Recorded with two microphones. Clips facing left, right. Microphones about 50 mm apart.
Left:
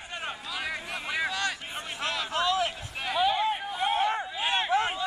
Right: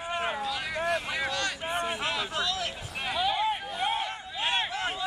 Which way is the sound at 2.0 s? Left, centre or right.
Centre.